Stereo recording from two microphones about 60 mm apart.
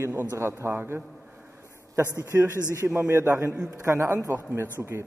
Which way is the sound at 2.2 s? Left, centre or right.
Right.